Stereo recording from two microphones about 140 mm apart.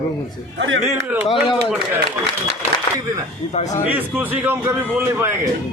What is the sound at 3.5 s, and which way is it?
Speech, 60° left (ahead or behind).